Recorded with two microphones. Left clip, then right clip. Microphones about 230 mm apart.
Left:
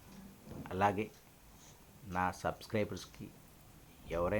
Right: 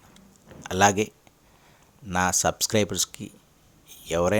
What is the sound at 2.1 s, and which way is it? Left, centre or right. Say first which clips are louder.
Speech: right 12 dB; right.